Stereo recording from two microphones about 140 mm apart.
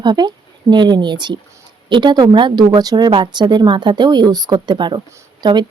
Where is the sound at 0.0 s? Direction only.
30° right (ahead or behind).